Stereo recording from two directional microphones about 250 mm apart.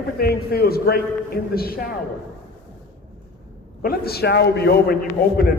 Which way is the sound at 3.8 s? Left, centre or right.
Left.